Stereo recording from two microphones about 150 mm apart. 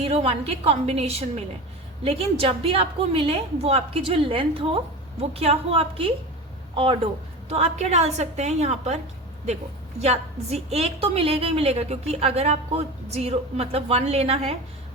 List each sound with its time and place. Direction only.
0.0 s a woman's voice: 40° right (ahead or behind)
10.0 s a woman's voice: 45° right (ahead or behind)